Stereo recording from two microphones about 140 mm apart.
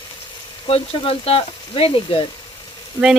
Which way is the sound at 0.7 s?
45° left (ahead or behind).